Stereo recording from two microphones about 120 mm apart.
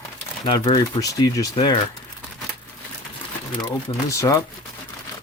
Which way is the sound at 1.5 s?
45° left (ahead or behind).